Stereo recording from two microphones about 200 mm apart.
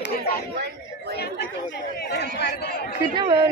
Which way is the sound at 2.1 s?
55° left (ahead or behind).